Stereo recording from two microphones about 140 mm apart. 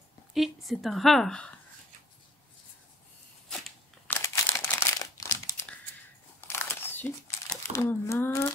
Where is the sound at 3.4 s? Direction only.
Centre (ahead or behind).